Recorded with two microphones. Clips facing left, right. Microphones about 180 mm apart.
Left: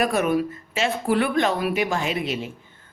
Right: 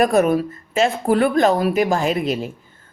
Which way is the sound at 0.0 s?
40° right (ahead or behind).